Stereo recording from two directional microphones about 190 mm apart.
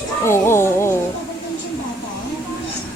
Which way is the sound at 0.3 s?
15° left (ahead or behind).